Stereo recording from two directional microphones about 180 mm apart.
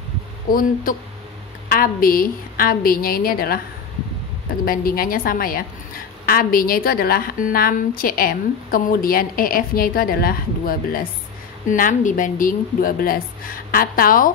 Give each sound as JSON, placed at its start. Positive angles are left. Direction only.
{"t": 0.5, "sound": "a woman's voice", "side_deg": 50}
{"t": 4.6, "sound": "a woman's voice", "side_deg": 55}